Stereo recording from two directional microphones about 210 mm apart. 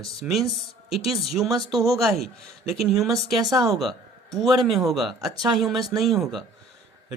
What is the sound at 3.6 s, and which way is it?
Speech, centre (ahead or behind).